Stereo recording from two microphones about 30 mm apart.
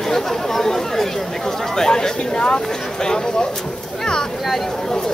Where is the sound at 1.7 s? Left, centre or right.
Left.